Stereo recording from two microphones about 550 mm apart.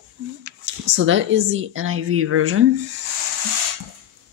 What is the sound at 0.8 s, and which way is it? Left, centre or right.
Speech, centre.